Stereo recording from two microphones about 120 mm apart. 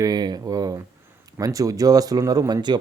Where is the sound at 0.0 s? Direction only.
35° right (ahead or behind).